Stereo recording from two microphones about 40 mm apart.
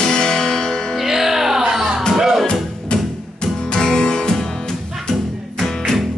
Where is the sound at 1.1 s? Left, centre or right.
Centre.